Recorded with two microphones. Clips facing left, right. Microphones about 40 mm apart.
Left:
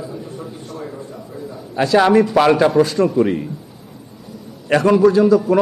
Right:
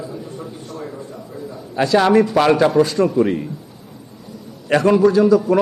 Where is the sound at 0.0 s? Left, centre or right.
Centre.